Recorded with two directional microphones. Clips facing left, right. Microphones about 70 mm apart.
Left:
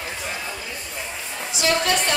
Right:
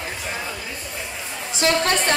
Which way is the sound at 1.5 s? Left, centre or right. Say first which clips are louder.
Right 2 dB; right.